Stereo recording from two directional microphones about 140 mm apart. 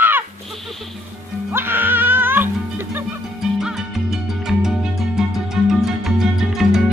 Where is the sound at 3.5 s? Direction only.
5° right (ahead or behind).